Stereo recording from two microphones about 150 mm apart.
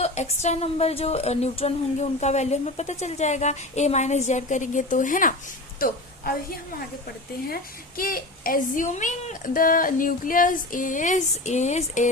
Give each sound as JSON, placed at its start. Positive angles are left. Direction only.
{"t": 0.0, "sound": "a woman's voice", "side_deg": 45}
{"t": 5.8, "sound": "a woman's voice", "side_deg": 80}